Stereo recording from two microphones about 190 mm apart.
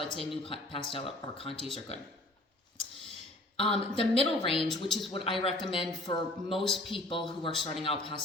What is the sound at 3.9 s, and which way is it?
Speech, 30° left (ahead or behind).